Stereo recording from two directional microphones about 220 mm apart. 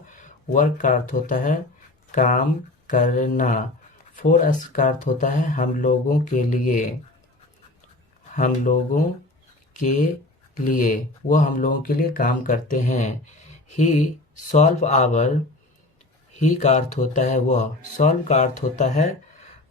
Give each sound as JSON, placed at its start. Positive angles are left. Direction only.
{"t": 0.1, "sound": "speech", "side_deg": 35}
{"t": 8.4, "sound": "speech", "side_deg": 35}
{"t": 16.4, "sound": "speech", "side_deg": 30}